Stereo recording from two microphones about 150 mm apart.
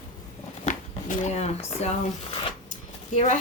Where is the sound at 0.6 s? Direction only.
55° left (ahead or behind).